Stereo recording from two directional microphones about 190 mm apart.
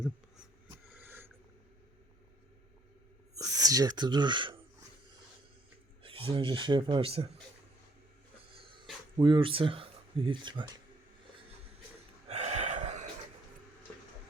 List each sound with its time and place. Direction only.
0.9 s a sound: 10° right (ahead or behind)
3.3 s speech: 20° right (ahead or behind)
6.0 s a man's voice: 30° right (ahead or behind)
9.1 s speech: 25° right (ahead or behind)
12.3 s gasp: 35° right (ahead or behind)